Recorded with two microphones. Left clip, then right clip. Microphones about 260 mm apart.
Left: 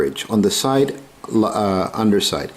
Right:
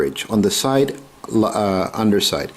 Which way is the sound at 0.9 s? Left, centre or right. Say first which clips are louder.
Even; centre.